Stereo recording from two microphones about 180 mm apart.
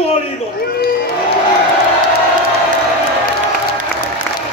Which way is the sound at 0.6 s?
55° left (ahead or behind).